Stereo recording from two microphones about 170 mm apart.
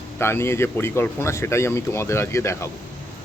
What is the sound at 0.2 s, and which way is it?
A man's voice, 15° left (ahead or behind).